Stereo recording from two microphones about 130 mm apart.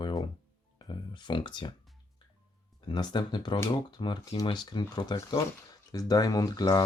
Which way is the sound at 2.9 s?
35° left (ahead or behind).